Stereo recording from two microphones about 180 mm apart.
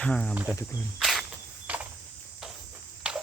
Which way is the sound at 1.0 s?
Centre (ahead or behind).